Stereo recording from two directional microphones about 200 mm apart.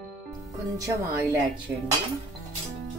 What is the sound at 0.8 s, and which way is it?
Speech, 15° right (ahead or behind).